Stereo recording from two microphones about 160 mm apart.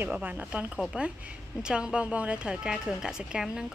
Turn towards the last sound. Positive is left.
turn(degrees=-5)  # may be behind; listen again after turning